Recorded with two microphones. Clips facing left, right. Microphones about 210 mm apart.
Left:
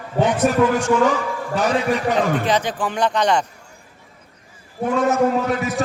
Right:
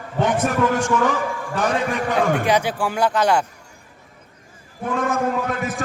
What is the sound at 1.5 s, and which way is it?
Speech, 50° right (ahead or behind).